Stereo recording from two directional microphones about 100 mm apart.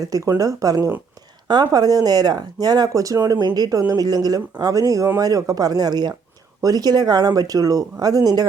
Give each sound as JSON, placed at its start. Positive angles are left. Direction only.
{"t": 0.1, "sound": "speech", "side_deg": -35}